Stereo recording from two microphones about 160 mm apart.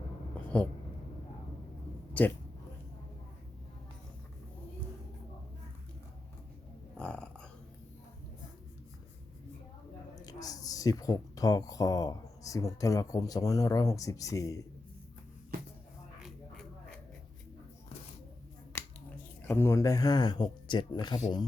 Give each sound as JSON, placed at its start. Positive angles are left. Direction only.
{"t": 0.5, "sound": "speech", "side_deg": 10}
{"t": 6.9, "sound": "a sound", "side_deg": 5}
{"t": 10.2, "sound": "a woman's voice", "side_deg": 20}
{"t": 18.7, "sound": "finger snapping", "side_deg": 15}
{"t": 19.4, "sound": "speech", "side_deg": 15}